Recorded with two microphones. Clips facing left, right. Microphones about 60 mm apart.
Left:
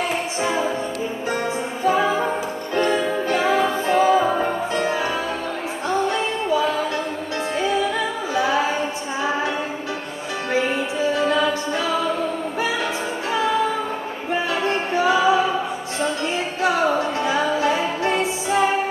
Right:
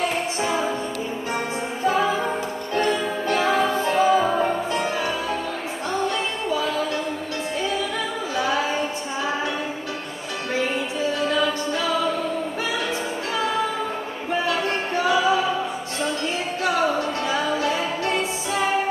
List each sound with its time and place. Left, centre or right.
1.9 s music: left
4.2 s music: centre
8.4 s music: left
11.1 s music: left
14.5 s music: left
17.2 s music: left